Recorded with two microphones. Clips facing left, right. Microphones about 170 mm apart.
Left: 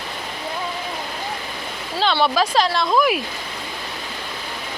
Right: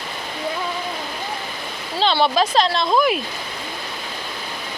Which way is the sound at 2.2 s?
25° right (ahead or behind).